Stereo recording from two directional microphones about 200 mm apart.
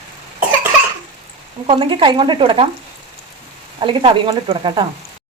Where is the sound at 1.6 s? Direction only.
25° right (ahead or behind).